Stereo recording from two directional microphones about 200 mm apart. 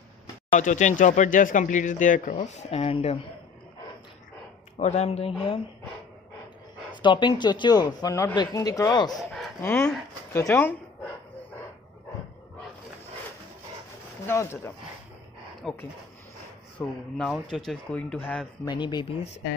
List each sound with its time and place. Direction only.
0.5 s speech: 35° left (ahead or behind)
4.7 s speech: 35° left (ahead or behind)
6.9 s speech: 25° left (ahead or behind)
9.1 s speech: centre (ahead or behind)
14.2 s speech: 15° left (ahead or behind)
18.7 s speech: 20° left (ahead or behind)